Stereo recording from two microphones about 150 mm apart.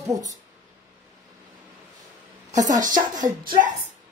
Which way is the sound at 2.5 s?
55° right (ahead or behind).